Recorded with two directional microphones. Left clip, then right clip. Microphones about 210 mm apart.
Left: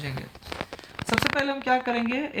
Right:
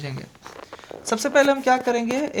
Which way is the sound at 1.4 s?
55° right (ahead or behind).